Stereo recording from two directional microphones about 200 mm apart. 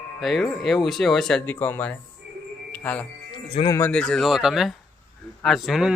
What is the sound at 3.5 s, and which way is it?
Speech, 20° left (ahead or behind).